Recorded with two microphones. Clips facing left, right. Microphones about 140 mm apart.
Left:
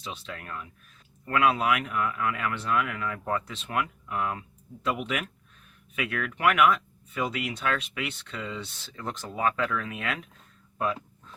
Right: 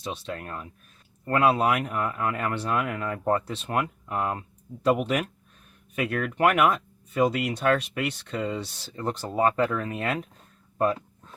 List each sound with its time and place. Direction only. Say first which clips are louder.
0.3 s speech: right 4 dB; 40° right (ahead or behind)